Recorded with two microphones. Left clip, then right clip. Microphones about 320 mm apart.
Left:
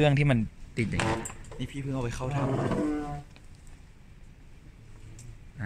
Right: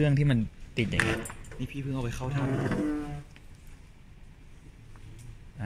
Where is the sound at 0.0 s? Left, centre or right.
Centre.